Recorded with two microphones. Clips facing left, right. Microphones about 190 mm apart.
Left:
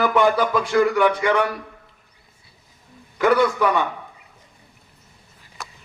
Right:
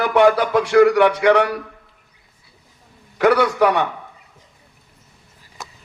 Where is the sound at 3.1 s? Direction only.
70° right (ahead or behind).